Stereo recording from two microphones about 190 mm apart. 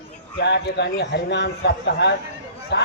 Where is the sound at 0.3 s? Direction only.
60° left (ahead or behind).